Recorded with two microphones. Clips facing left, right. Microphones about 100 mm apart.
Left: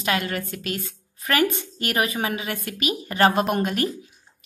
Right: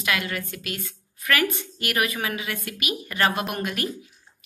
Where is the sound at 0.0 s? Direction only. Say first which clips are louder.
Left 2 dB; 35° left (ahead or behind).